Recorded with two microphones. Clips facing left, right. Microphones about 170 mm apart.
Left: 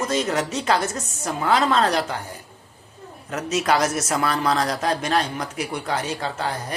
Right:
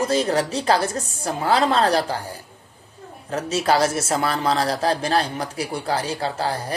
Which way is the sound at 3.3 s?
30° right (ahead or behind).